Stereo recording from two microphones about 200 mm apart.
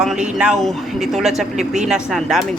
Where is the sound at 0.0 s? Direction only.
5° right (ahead or behind).